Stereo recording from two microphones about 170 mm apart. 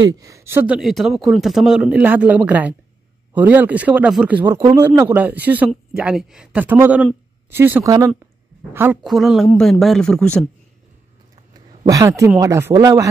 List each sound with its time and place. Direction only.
0.1 s speech: 20° right (ahead or behind)
9.0 s speech: centre (ahead or behind)
11.9 s speech: 20° right (ahead or behind)